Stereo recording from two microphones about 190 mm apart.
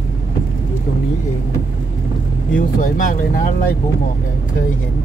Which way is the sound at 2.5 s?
45° left (ahead or behind).